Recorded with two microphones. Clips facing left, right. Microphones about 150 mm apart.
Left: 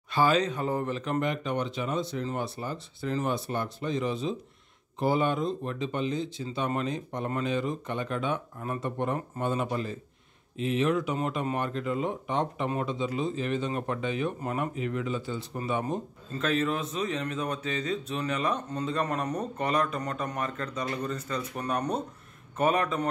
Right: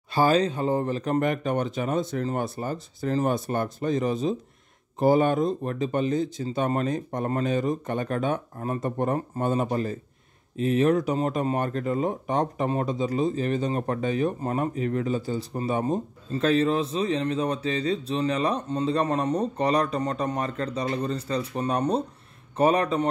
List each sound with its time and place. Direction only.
0.1 s speech: 35° right (ahead or behind)